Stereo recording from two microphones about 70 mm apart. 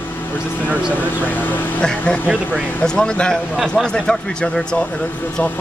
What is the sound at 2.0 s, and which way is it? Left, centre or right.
Speech, left.